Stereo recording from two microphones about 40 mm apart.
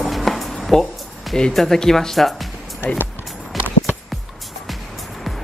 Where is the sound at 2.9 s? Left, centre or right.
Left.